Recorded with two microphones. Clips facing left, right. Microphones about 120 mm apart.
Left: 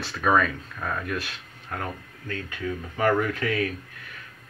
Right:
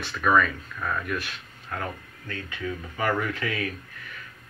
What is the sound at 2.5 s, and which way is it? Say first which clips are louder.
Speech: right 1 dB; 50° left (ahead or behind).